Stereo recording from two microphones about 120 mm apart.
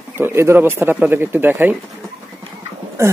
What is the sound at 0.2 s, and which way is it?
Speech, 20° right (ahead or behind).